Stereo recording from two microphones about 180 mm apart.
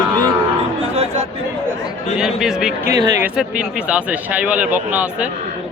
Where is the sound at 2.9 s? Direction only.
20° right (ahead or behind).